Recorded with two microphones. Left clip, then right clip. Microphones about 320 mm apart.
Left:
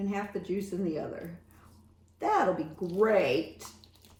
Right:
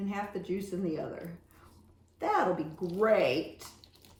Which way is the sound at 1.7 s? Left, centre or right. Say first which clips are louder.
Even; centre.